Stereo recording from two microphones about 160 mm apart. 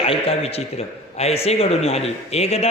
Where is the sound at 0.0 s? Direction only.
40° left (ahead or behind).